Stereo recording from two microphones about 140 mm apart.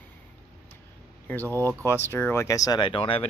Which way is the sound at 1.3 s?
15° left (ahead or behind).